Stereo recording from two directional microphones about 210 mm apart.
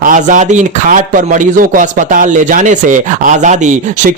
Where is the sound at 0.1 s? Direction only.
35° right (ahead or behind).